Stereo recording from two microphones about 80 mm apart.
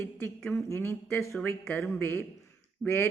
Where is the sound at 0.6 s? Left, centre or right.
Left.